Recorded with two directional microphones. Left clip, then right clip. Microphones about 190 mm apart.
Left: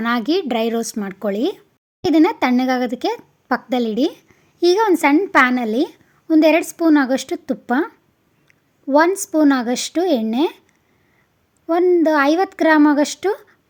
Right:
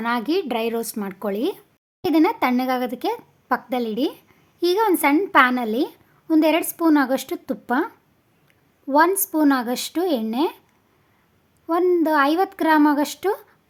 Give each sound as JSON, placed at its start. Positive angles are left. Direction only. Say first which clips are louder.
{"t": 0.0, "sound": "a woman's voice", "louder": "left 3 dB", "side_deg": 15}
{"t": 11.6, "sound": "a woman's voice", "louder": "left 4 dB", "side_deg": 15}